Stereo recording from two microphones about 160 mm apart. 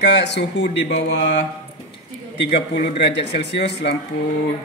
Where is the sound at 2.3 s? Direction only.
90° left.